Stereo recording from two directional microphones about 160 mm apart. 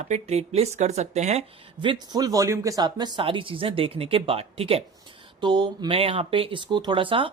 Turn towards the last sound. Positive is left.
turn(degrees=-35)  # may be behind; listen again after turning